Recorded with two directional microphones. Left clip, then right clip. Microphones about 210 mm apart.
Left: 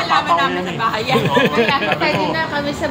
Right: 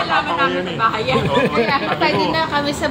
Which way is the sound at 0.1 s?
25° left (ahead or behind).